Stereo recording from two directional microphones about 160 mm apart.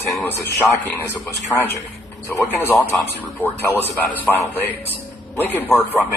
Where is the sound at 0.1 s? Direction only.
15° left (ahead or behind).